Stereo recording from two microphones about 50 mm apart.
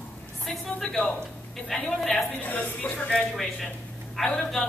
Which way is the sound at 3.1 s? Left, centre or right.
Centre.